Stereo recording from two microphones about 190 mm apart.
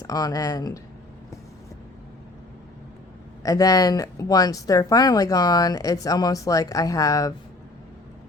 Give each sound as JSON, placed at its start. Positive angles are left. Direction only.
{"t": 0.0, "sound": "speech", "side_deg": 20}
{"t": 3.4, "sound": "speech", "side_deg": 20}